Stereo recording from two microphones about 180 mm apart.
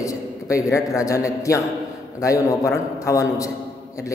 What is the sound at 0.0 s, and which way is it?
A man's voice, 15° left (ahead or behind).